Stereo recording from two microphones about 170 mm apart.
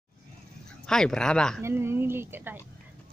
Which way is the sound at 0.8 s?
5° left (ahead or behind).